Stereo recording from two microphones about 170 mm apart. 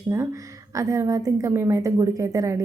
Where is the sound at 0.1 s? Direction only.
15° right (ahead or behind).